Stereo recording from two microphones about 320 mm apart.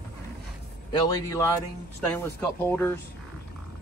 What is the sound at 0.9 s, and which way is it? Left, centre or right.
Speech, centre.